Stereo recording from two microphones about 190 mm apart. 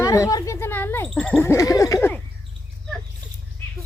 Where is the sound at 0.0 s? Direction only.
15° left (ahead or behind).